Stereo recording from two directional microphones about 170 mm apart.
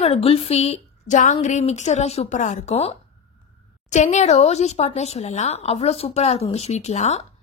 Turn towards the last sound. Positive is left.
turn(degrees=40)  # may be behind; listen again after turning